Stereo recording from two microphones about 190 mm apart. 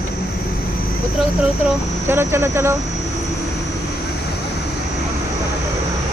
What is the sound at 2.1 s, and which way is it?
Speech, 15° right (ahead or behind).